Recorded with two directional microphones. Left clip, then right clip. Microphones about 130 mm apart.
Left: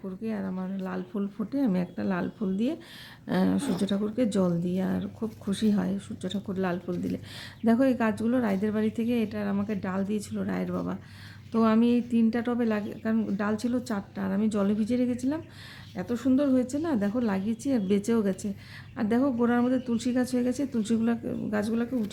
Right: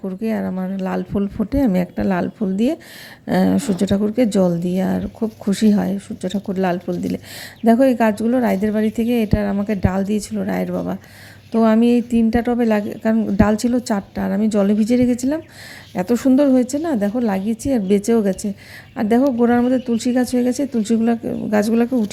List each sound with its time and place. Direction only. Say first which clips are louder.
0.0 s a woman's voice: right 11 dB; 50° right (ahead or behind)
16.0 s a woman's voice: right 11 dB; 65° right (ahead or behind)